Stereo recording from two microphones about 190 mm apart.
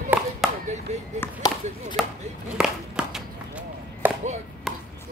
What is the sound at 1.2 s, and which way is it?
Speech, 20° left (ahead or behind).